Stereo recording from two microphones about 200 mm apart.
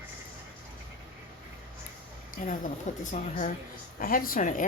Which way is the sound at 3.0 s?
40° left (ahead or behind).